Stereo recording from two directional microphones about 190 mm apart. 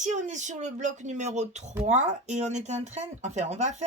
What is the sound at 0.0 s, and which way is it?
Speech, 40° right (ahead or behind).